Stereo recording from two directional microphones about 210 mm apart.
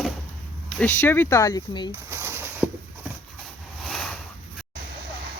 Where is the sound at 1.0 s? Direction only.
10° left (ahead or behind).